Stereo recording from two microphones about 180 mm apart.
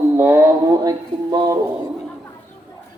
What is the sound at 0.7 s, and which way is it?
Speech, 20° right (ahead or behind).